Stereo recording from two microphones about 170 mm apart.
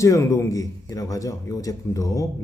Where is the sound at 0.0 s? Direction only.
15° left (ahead or behind).